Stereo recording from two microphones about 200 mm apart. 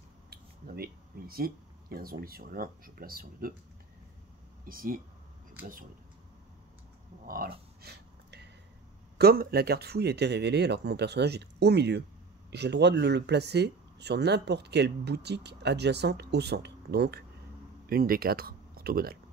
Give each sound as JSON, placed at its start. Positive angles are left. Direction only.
{"t": 0.3, "sound": "speech", "side_deg": -50}
{"t": 4.6, "sound": "speech", "side_deg": -45}
{"t": 7.2, "sound": "a sound", "side_deg": -50}
{"t": 9.2, "sound": "speech", "side_deg": -50}